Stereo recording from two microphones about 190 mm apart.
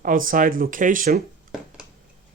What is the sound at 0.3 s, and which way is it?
Speech, 45° right (ahead or behind).